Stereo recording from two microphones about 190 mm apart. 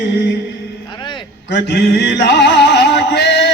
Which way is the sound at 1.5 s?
65° left (ahead or behind).